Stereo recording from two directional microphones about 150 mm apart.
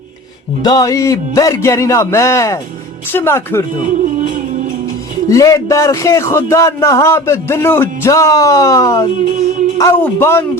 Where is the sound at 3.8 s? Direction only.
60° right (ahead or behind).